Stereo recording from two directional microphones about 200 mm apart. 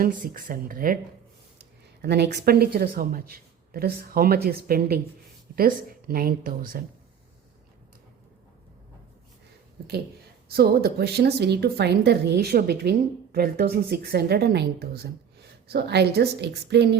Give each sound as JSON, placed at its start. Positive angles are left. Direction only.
{"t": 0.0, "sound": "speech", "side_deg": -45}
{"t": 2.0, "sound": "speech", "side_deg": -60}
{"t": 10.5, "sound": "a woman's voice", "side_deg": -50}